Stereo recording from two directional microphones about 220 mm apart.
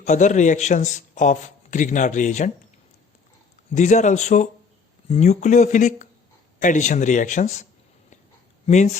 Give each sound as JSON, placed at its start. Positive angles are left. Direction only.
{"t": 0.0, "sound": "a man's voice", "side_deg": 35}
{"t": 3.7, "sound": "a man's voice", "side_deg": 35}